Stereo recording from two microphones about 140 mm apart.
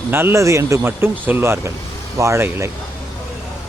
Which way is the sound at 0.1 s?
15° right (ahead or behind).